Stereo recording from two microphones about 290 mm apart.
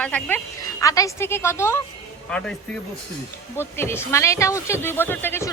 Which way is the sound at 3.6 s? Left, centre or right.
Centre.